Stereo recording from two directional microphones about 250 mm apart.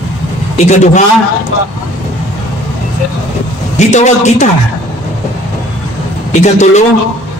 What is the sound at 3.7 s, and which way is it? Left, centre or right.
Speech, left.